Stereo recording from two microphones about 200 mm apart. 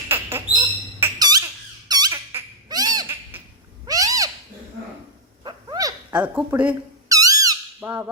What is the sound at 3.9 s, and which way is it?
Cat, 15° right (ahead or behind).